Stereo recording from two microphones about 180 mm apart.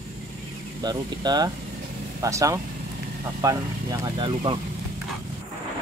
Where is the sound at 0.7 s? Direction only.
25° right (ahead or behind).